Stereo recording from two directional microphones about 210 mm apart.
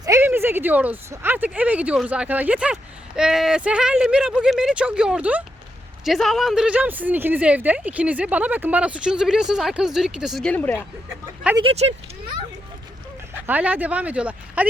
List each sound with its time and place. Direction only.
0.0 s a woman's voice: 15° right (ahead or behind); by 10.8 s 10° left (ahead or behind)
11.5 s speech: 25° right (ahead or behind)
13.5 s speech: 10° right (ahead or behind)